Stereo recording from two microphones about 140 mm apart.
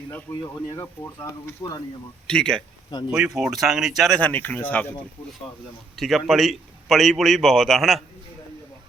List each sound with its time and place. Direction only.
0.1 s speech: 15° left (ahead or behind)
0.3 s speech: 25° left (ahead or behind)
2.2 s a man's voice: 5° left (ahead or behind)
4.2 s speech: 10° left (ahead or behind)
6.0 s a man's voice: centre (ahead or behind)